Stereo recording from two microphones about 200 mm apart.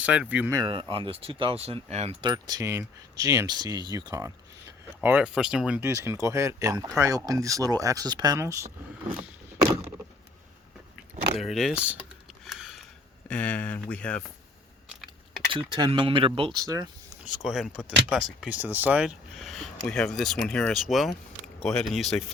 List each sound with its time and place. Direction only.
0.0 s speech: 5° right (ahead or behind)
0.6 s speech: 25° right (ahead or behind)
10.9 s speech: centre (ahead or behind)
12.5 s a sound: centre (ahead or behind)
13.2 s speech: 5° left (ahead or behind)
15.5 s speech: 25° right (ahead or behind)
17.4 s speech: centre (ahead or behind)